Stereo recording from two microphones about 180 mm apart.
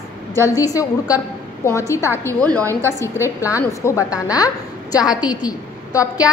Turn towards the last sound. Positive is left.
turn(degrees=20)  # may be behind; listen again after turning